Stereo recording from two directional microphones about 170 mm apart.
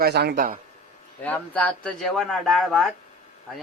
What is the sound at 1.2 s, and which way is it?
Speech, 10° left (ahead or behind).